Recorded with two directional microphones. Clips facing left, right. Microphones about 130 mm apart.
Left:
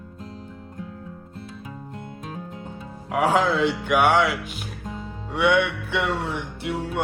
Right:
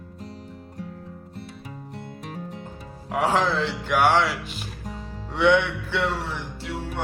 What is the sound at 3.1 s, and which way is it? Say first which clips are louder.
Music: left 2 dB; 5° left (ahead or behind).